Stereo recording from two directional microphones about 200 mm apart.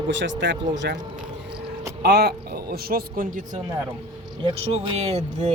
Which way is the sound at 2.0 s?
55° right (ahead or behind).